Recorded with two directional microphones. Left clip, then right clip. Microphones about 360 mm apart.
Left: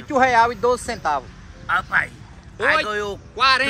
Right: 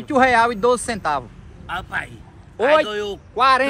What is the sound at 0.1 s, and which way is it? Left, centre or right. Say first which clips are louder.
Speech: right 1 dB; right.